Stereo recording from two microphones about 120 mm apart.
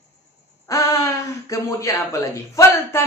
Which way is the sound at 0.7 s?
30° left (ahead or behind).